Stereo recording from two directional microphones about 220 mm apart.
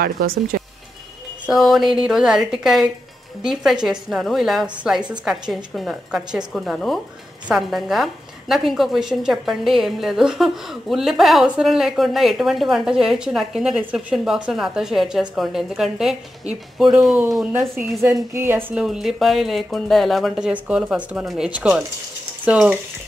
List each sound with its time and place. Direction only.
0.0 s speech: 40° right (ahead or behind)
1.4 s a woman's voice: centre (ahead or behind)